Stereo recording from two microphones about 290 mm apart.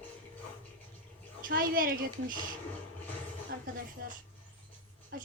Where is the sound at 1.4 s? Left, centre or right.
Right.